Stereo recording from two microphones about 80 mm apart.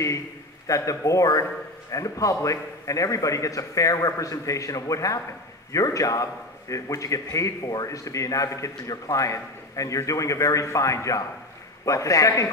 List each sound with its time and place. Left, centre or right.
0.7 s a man's voice: left